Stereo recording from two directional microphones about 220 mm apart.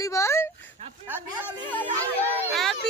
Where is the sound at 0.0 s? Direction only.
15° left (ahead or behind).